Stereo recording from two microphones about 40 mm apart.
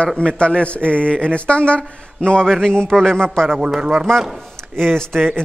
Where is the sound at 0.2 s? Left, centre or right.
Left.